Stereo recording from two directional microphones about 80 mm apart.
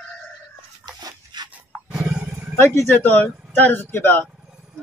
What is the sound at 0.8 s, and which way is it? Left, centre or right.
Dog, right.